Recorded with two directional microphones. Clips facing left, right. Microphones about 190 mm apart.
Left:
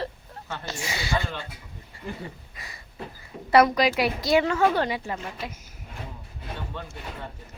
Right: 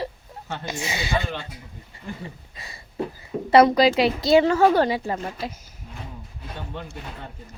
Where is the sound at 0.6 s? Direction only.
20° right (ahead or behind).